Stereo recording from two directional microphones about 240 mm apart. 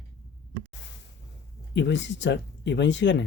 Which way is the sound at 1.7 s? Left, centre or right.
Left.